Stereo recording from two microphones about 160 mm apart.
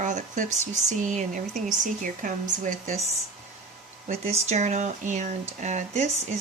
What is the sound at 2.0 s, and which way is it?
Speech, 55° right (ahead or behind).